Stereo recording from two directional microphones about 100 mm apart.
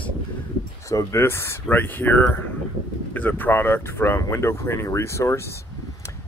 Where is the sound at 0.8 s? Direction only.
30° left (ahead or behind).